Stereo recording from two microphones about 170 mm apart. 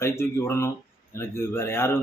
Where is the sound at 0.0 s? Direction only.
15° left (ahead or behind).